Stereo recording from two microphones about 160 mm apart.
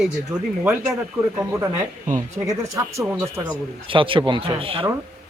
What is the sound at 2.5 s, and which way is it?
Speech, 20° right (ahead or behind).